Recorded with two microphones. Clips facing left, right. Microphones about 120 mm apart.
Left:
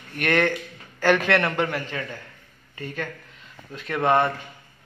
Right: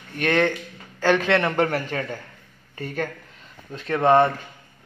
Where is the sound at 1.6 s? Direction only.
40° right (ahead or behind).